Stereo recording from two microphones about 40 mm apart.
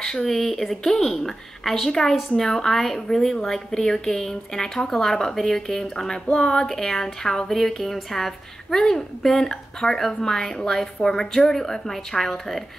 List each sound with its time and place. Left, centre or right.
0.0 s a woman's voice: centre